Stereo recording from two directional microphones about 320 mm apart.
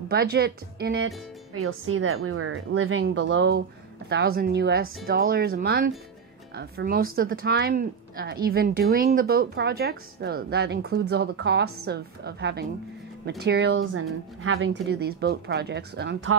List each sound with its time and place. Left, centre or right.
0.1 s speech: right